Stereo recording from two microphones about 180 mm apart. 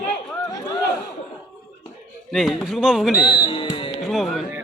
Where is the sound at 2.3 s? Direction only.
Centre (ahead or behind).